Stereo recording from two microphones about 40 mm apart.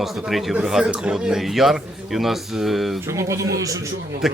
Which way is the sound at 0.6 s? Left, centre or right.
Centre.